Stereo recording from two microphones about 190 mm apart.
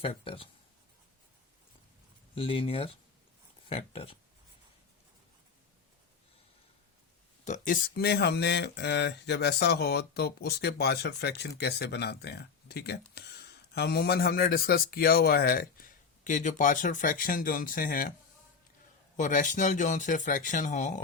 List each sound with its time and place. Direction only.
0.0 s speech: 30° left (ahead or behind)
2.3 s speech: 30° left (ahead or behind)
7.4 s speech: 40° left (ahead or behind)
19.1 s speech: 40° left (ahead or behind)